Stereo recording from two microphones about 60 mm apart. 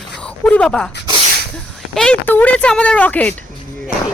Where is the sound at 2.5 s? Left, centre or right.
Centre.